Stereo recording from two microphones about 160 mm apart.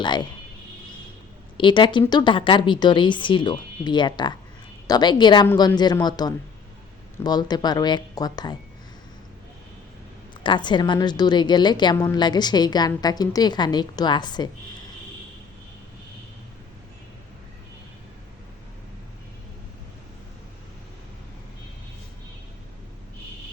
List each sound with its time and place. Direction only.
0.0 s a woman's voice: 30° left (ahead or behind)
1.5 s a woman's voice: 30° left (ahead or behind)
10.4 s a woman's voice: 30° left (ahead or behind)